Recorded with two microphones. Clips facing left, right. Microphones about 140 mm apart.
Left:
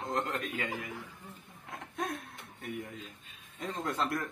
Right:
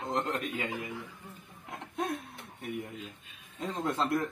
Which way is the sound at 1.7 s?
30° right (ahead or behind).